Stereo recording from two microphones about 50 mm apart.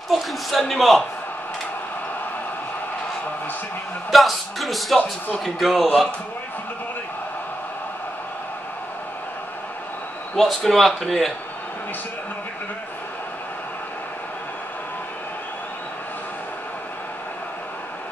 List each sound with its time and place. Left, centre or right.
0.1 s speech: centre
4.1 s speech: centre
10.3 s speech: centre